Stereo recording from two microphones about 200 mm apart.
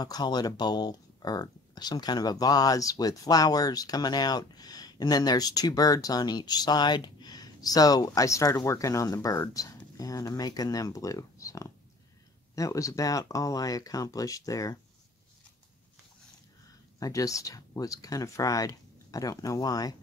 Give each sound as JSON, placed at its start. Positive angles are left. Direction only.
{"t": 0.0, "sound": "speech", "side_deg": 20}
{"t": 17.0, "sound": "speech", "side_deg": 15}